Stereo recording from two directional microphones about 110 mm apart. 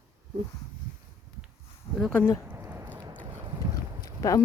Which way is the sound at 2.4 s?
20° right (ahead or behind).